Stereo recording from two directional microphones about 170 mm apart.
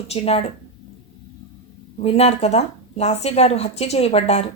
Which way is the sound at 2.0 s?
40° left (ahead or behind).